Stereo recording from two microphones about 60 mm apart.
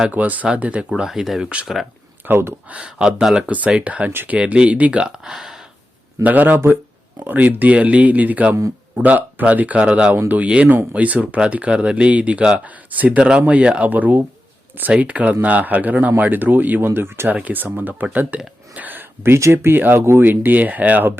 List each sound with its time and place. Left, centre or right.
0.1 s speech: right
1.0 s speech: centre
2.2 s speech: right
2.6 s speech: centre
3.4 s speech: right; by 5.5 s centre
6.2 s speech: right
17.3 s speech: right